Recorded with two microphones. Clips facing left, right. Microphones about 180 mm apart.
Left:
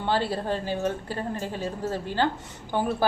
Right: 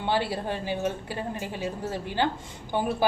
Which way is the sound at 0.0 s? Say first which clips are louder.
Left 1 dB; 15° right (ahead or behind).